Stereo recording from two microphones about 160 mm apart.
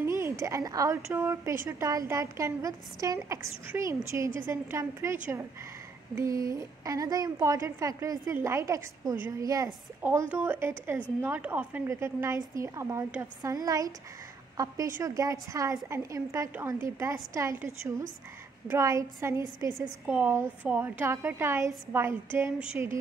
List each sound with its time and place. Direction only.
0.0 s a woman's voice: 15° right (ahead or behind)
15.0 s a woman's voice: 20° right (ahead or behind)